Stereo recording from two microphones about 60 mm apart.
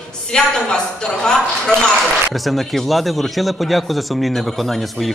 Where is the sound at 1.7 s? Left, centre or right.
Right.